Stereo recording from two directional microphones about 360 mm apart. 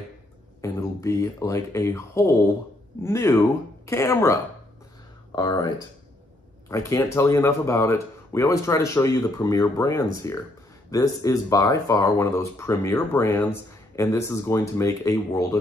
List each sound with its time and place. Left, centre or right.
0.6 s speech: centre
6.7 s speech: centre